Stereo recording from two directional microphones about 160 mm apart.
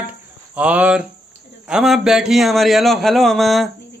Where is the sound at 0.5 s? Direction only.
10° right (ahead or behind).